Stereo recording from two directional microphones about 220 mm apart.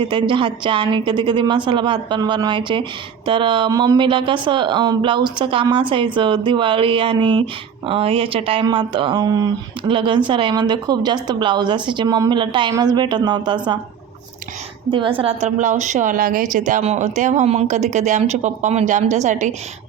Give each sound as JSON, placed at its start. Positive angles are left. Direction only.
{"t": 0.1, "sound": "speech", "side_deg": -20}
{"t": 14.8, "sound": "a woman's voice", "side_deg": -25}